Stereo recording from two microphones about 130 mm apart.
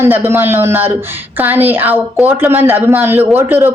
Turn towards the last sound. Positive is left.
turn(degrees=-15)  # may be behind; listen again after turning